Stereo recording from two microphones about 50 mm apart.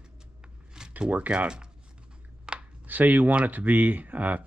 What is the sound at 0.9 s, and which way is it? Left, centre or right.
Speech, right.